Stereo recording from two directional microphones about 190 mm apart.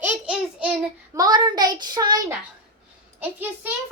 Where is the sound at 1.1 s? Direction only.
20° right (ahead or behind).